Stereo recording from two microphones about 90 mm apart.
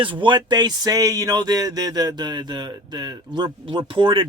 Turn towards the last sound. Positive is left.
turn(degrees=-65)  # may be behind; listen again after turning